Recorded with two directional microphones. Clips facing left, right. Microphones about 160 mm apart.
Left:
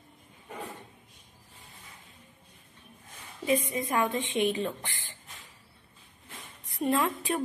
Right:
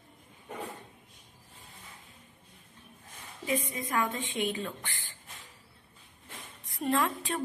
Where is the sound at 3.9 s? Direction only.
20° left (ahead or behind).